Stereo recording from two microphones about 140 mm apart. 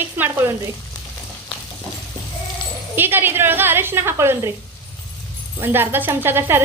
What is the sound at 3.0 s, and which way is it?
Speech, 15° right (ahead or behind).